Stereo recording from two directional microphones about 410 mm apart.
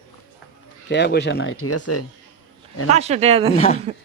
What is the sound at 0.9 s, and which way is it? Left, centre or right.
Speech, left.